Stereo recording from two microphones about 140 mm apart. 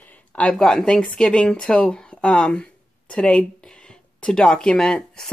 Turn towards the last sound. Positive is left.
turn(degrees=5)  # may be behind; listen again after turning